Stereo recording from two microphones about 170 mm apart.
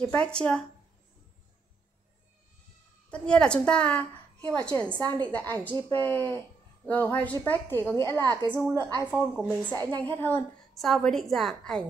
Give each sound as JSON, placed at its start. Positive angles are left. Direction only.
{"t": 0.0, "sound": "a woman's voice", "side_deg": 5}
{"t": 3.1, "sound": "a woman's voice", "side_deg": 5}
{"t": 8.1, "sound": "a woman's voice", "side_deg": -25}
{"t": 9.0, "sound": "speech", "side_deg": -10}
{"t": 9.8, "sound": "a woman's voice", "side_deg": -25}
{"t": 10.1, "sound": "a woman's voice", "side_deg": 15}
{"t": 10.8, "sound": "a woman's voice", "side_deg": 0}